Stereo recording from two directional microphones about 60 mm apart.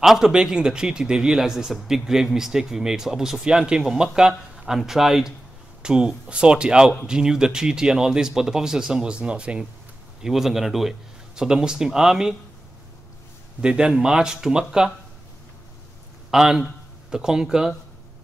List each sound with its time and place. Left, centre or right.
0.0 s a man's voice: centre
10.2 s a man's voice: centre
13.6 s a man's voice: centre
16.3 s a man's voice: centre